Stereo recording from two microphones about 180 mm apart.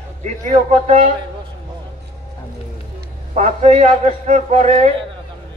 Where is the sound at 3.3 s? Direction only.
40° right (ahead or behind).